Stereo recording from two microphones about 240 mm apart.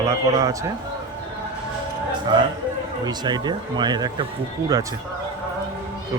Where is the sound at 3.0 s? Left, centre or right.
Centre.